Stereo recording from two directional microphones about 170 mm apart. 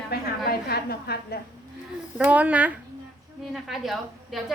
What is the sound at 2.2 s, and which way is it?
A woman's voice, 10° right (ahead or behind).